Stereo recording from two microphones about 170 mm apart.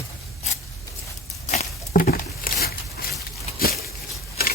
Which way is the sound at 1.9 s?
60° left (ahead or behind).